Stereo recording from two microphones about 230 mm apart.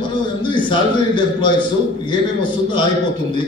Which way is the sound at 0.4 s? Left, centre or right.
Left.